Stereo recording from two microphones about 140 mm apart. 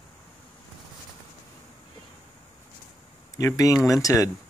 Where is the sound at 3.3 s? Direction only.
25° left (ahead or behind).